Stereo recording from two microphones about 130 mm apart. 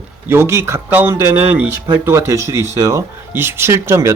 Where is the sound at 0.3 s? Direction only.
20° right (ahead or behind).